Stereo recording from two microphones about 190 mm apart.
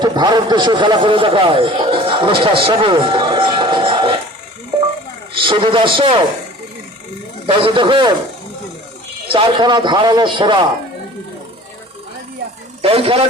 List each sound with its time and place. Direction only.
0.0 s a man's voice: 20° right (ahead or behind)
5.3 s a man's voice: 25° right (ahead or behind)
7.4 s a man's voice: 25° right (ahead or behind)
9.3 s a man's voice: 25° right (ahead or behind)
12.8 s a man's voice: 30° right (ahead or behind)